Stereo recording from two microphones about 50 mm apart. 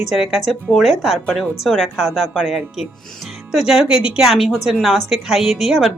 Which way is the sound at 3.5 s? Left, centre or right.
Centre.